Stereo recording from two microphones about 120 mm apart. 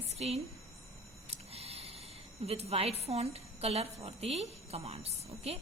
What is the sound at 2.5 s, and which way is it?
A woman's voice, 60° right (ahead or behind).